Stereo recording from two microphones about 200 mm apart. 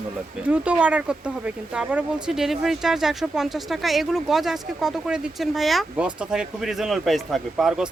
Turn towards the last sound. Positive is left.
turn(degrees=0)  # may be behind; listen again after turning